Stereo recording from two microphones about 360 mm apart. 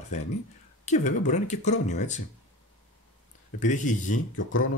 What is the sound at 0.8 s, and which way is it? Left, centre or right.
Speech, centre.